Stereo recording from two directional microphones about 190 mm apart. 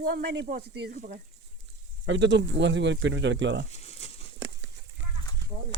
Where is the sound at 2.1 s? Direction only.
70° right (ahead or behind).